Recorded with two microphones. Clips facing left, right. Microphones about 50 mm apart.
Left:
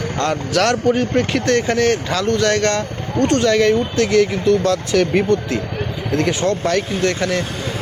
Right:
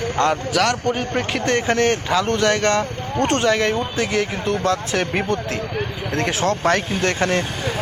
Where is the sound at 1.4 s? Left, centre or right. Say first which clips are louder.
Right 1 dB; right.